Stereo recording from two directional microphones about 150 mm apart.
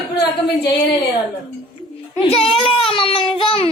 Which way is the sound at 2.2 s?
40° left (ahead or behind).